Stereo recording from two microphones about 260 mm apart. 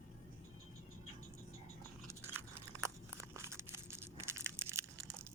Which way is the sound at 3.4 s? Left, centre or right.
Centre.